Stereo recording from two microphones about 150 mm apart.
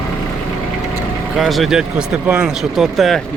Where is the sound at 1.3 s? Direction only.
Centre (ahead or behind).